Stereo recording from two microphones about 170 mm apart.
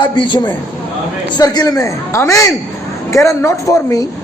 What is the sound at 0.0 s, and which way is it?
A man's voice, 25° left (ahead or behind).